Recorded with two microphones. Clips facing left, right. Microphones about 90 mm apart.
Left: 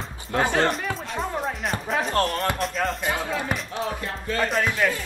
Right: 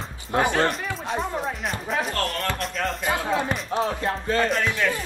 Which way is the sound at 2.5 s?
Centre (ahead or behind).